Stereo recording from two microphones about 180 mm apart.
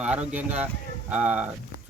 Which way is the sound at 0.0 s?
5° right (ahead or behind).